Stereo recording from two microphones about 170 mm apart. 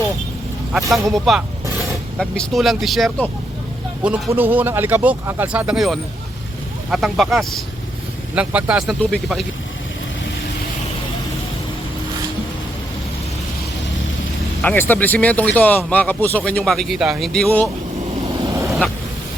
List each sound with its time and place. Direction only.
1.1 s speech: centre (ahead or behind)
14.6 s speech: 10° left (ahead or behind)
18.4 s vehicle: 20° right (ahead or behind)